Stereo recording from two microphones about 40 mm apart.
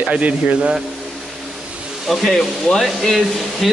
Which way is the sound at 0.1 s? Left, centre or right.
Right.